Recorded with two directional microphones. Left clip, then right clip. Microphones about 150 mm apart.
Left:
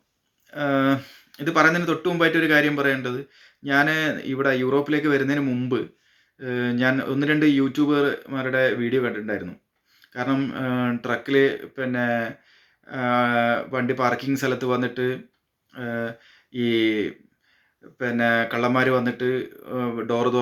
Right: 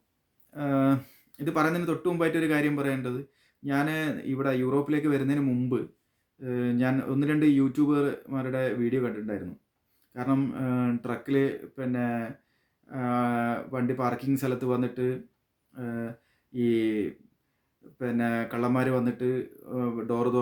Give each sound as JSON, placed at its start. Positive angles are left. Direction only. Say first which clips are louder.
{"t": 0.5, "sound": "speech", "louder": "left 5 dB", "side_deg": -45}